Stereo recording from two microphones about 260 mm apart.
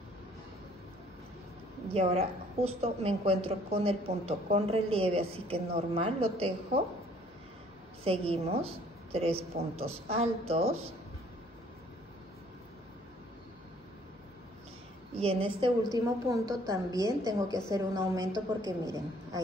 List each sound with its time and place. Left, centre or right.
2.0 s a woman's voice: right
8.0 s a woman's voice: right
15.1 s a woman's voice: right
17.5 s a woman's voice: centre
17.7 s a woman's voice: centre